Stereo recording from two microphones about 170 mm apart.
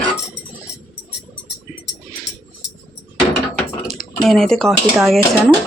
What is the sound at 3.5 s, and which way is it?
Dishes, centre (ahead or behind).